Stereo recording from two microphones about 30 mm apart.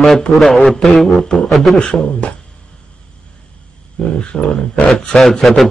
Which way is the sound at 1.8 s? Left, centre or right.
Left.